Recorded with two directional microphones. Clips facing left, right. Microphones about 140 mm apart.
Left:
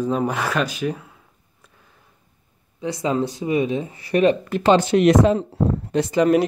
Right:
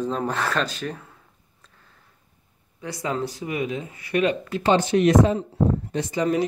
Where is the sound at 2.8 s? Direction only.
20° left (ahead or behind).